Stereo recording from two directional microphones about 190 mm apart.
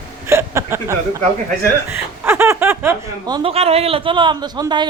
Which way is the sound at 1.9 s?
10° right (ahead or behind).